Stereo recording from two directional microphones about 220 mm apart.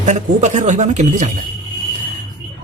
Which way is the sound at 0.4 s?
35° right (ahead or behind).